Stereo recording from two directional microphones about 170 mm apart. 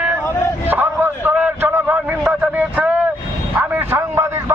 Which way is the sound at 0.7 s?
10° right (ahead or behind).